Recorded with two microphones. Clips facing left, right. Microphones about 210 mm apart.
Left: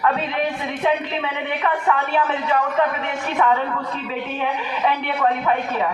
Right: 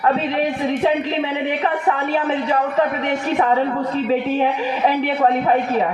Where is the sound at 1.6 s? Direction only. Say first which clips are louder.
Right 1 dB; 35° right (ahead or behind).